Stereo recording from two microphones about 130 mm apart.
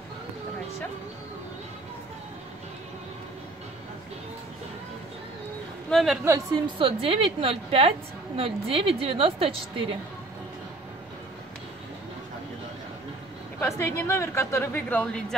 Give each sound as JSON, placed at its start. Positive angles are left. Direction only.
{"t": 5.9, "sound": "a woman's voice", "side_deg": 0}
{"t": 6.5, "sound": "a woman's voice", "side_deg": -45}
{"t": 13.6, "sound": "a woman's voice", "side_deg": 20}